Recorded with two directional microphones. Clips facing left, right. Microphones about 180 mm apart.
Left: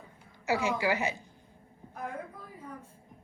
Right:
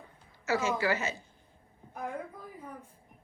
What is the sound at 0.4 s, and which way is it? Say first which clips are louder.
Speech: even; 15° left (ahead or behind).